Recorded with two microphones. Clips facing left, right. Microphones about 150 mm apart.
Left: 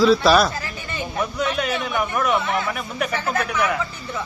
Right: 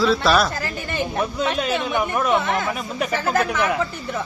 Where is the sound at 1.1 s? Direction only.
30° right (ahead or behind).